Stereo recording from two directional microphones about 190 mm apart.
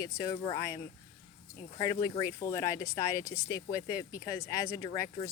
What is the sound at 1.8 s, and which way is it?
Speech, 20° left (ahead or behind).